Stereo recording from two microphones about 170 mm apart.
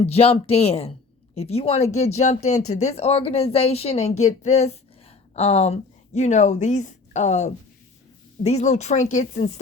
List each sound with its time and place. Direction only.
0.0 s speech: 35° left (ahead or behind)